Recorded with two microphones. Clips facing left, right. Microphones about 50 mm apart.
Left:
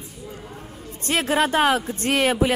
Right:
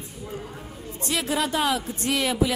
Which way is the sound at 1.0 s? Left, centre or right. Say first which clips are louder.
Left 5 dB; left.